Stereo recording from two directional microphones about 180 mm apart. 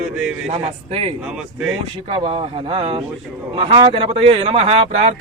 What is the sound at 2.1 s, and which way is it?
Speech, 30° right (ahead or behind).